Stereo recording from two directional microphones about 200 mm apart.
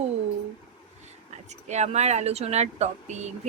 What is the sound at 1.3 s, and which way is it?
Speech, 35° right (ahead or behind).